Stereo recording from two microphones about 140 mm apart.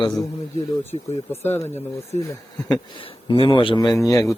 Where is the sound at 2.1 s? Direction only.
50° left (ahead or behind).